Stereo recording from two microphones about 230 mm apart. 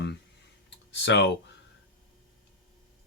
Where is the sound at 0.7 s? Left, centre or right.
Left.